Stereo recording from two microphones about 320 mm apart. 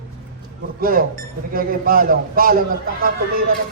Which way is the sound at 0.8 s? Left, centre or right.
Right.